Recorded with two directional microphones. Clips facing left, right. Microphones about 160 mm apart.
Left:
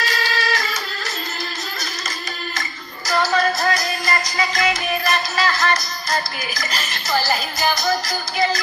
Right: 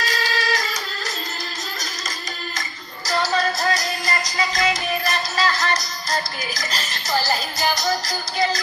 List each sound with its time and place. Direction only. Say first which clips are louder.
0.0 s music: left 1 dB; 40° right (ahead or behind)
3.3 s music: left 2 dB; 35° right (ahead or behind)